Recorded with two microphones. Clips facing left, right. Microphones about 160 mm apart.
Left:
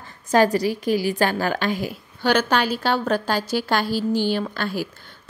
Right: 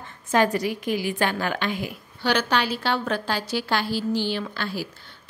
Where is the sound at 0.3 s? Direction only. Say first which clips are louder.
Left 4 dB; 35° left (ahead or behind).